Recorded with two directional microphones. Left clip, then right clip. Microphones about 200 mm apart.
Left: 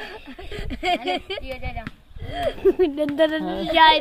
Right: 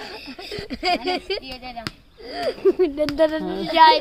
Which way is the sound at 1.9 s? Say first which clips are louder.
Right 6 dB; 40° right (ahead or behind).